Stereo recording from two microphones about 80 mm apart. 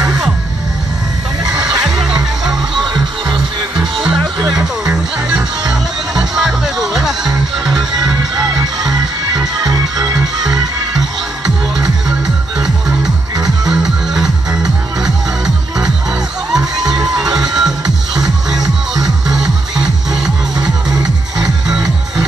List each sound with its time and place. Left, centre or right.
1.6 s music: centre
4.0 s music: centre
5.7 s music: centre
9.6 s music: right
10.5 s music: centre
13.7 s music: centre
16.5 s crowd: centre
17.2 s music: centre